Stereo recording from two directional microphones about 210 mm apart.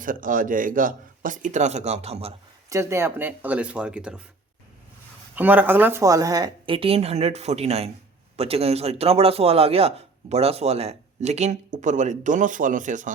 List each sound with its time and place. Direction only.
0.0 s a man's voice: 40° right (ahead or behind)
2.6 s speech: 15° right (ahead or behind)
5.3 s a woman's voice: 10° right (ahead or behind); by 13.1 s 35° right (ahead or behind)